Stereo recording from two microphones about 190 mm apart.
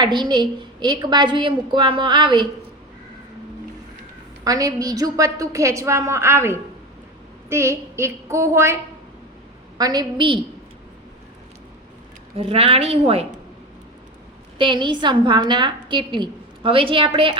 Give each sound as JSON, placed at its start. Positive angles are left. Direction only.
{"t": 0.0, "sound": "a woman's voice", "side_deg": -25}
{"t": 4.4, "sound": "a woman's voice", "side_deg": -20}
{"t": 12.4, "sound": "a woman's voice", "side_deg": -30}
{"t": 14.6, "sound": "a woman's voice", "side_deg": -25}